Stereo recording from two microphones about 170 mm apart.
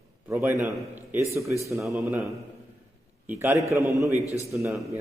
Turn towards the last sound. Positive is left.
turn(degrees=-5)  # may be behind; listen again after turning